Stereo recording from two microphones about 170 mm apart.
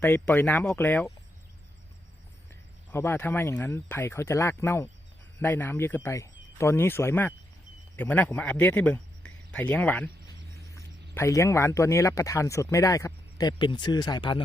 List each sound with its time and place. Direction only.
0.0 s speech: 10° left (ahead or behind)
2.9 s speech: 15° left (ahead or behind)
11.1 s speech: 15° left (ahead or behind)